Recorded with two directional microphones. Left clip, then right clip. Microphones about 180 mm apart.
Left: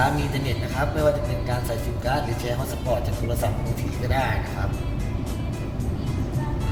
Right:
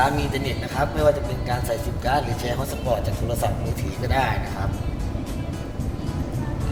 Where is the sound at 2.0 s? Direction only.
50° right (ahead or behind).